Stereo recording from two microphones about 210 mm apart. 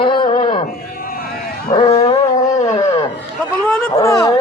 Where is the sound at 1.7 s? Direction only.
25° left (ahead or behind).